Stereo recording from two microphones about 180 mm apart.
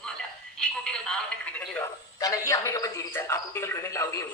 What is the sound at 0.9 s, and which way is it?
A man's voice, 5° left (ahead or behind).